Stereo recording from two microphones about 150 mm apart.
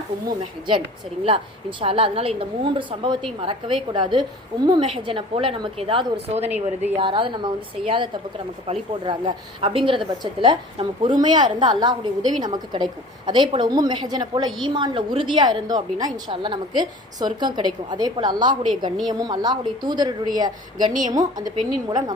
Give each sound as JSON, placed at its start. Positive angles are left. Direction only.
{"t": 1.3, "sound": "a woman's voice", "side_deg": -35}